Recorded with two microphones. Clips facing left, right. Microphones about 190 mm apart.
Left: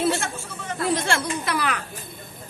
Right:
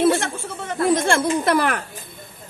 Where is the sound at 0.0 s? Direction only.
55° right (ahead or behind).